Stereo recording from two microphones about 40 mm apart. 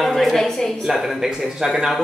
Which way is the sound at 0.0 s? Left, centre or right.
Centre.